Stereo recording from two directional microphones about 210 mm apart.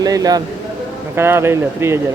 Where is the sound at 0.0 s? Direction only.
20° right (ahead or behind).